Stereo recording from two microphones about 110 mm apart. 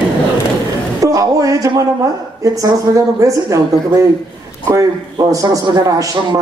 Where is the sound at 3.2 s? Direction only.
30° right (ahead or behind).